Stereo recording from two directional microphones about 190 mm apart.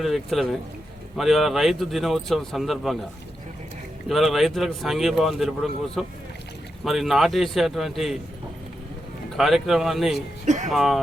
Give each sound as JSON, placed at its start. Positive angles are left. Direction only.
{"t": 0.0, "sound": "speech", "side_deg": 0}
{"t": 4.1, "sound": "speech", "side_deg": 0}
{"t": 9.4, "sound": "speech", "side_deg": 0}
{"t": 10.4, "sound": "music", "side_deg": -40}
{"t": 10.7, "sound": "speech", "side_deg": 0}